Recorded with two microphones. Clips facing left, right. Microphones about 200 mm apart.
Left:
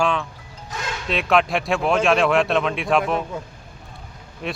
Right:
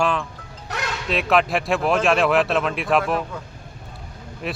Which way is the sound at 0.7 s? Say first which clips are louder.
Right 3 dB; 70° right (ahead or behind).